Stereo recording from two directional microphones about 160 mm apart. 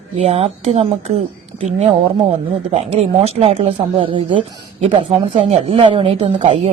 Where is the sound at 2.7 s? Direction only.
40° right (ahead or behind).